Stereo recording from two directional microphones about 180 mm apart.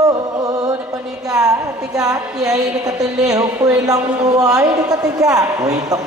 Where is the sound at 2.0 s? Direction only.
20° right (ahead or behind).